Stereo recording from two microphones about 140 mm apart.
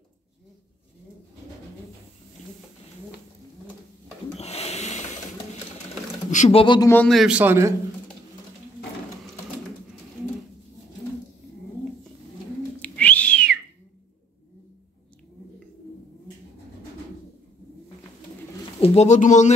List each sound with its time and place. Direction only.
4.4 s a sound: 50° left (ahead or behind)
6.3 s speech: 55° left (ahead or behind)
6.6 s a man's voice: 35° left (ahead or behind)
7.1 s a man's voice: 5° right (ahead or behind)
12.8 s owl: 10° left (ahead or behind)
18.8 s speech: 55° left (ahead or behind)